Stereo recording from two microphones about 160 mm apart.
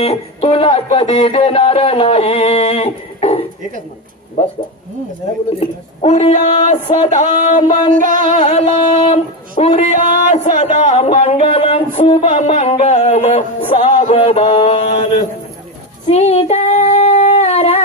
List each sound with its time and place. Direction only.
0.0 s speech: 40° left (ahead or behind)
4.4 s a sound: 45° left (ahead or behind)
5.6 s a sound: 40° left (ahead or behind)
7.6 s speech: 30° left (ahead or behind)
7.9 s music: 55° right (ahead or behind)
8.3 s speech: 40° left (ahead or behind)
16.1 s female singing: 40° left (ahead or behind)